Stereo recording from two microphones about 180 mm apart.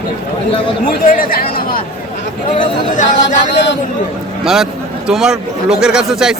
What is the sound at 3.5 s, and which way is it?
Speech, 75° left (ahead or behind).